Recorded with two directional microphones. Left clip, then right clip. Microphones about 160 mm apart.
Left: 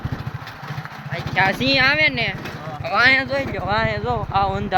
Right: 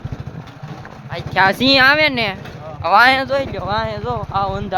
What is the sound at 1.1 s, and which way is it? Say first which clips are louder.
Speech: right 4 dB; 45° right (ahead or behind).